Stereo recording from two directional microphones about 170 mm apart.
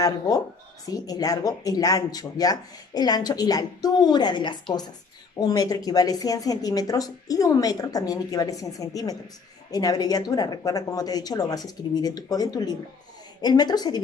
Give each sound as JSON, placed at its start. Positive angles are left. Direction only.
{"t": 0.8, "sound": "a woman's voice", "side_deg": 20}